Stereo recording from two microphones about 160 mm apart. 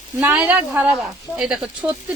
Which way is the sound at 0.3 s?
10° right (ahead or behind).